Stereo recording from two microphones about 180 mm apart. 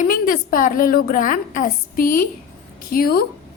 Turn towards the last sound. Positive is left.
turn(degrees=55)  # may be behind; listen again after turning